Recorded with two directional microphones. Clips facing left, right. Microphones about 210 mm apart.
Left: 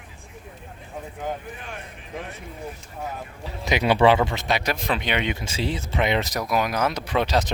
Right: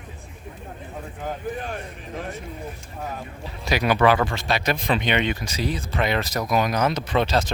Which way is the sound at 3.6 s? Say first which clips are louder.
Left 1 dB; 20° left (ahead or behind).